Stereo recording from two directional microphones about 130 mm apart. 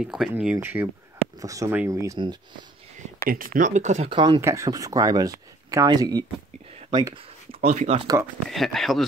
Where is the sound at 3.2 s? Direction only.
90° right; by 4.1 s 65° right (ahead or behind).